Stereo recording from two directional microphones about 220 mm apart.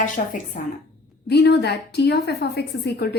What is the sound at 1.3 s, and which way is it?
A woman's voice, 50° left (ahead or behind).